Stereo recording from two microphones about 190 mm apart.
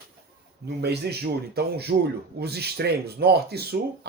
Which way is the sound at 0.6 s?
60° right (ahead or behind).